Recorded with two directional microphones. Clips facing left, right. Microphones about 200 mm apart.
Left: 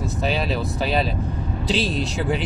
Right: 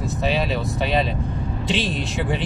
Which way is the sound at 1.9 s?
Centre (ahead or behind).